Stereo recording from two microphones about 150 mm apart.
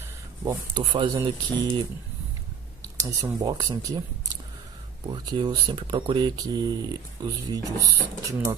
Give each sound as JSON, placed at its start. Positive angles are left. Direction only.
{"t": 0.5, "sound": "speech", "side_deg": -30}
{"t": 2.8, "sound": "speech", "side_deg": -25}
{"t": 5.1, "sound": "speech", "side_deg": -30}